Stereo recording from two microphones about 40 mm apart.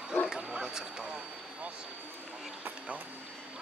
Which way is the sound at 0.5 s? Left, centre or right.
Right.